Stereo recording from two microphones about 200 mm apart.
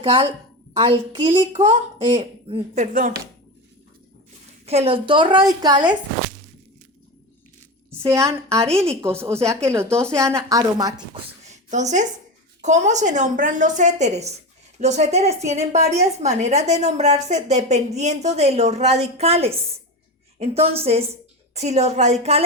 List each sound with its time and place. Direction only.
0.0 s a woman's voice: 30° right (ahead or behind)
4.6 s a woman's voice: 30° right (ahead or behind)
8.8 s a woman's voice: 15° right (ahead or behind)
11.4 s a sound: 35° right (ahead or behind)
12.6 s a woman's voice: 35° right (ahead or behind)